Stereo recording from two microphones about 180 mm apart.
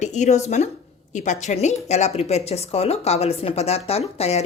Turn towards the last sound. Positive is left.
turn(degrees=35)  # may be behind; listen again after turning